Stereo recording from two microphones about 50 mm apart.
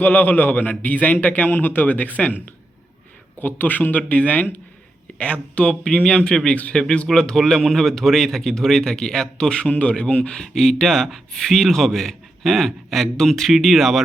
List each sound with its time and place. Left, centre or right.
0.0 s a man's voice: left
3.4 s a man's voice: left
5.1 s speech: left
10.3 s speech: centre